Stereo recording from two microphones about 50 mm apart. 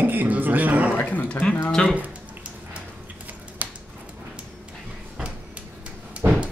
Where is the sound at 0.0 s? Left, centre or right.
Right.